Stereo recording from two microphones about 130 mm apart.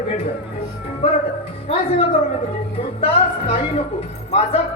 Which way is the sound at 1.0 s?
45° left (ahead or behind).